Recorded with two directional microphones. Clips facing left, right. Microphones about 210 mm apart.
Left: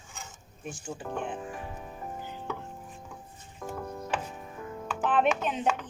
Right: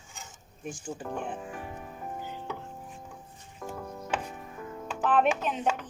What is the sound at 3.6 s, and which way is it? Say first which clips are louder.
Music: left 2 dB; centre (ahead or behind).